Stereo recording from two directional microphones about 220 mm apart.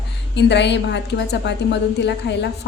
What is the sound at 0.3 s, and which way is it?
A woman's voice, 50° left (ahead or behind).